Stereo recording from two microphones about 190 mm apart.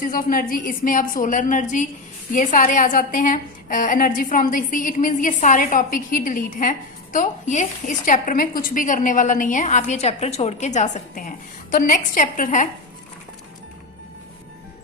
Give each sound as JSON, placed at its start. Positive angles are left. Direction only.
{"t": 0.0, "sound": "a woman's voice", "side_deg": 45}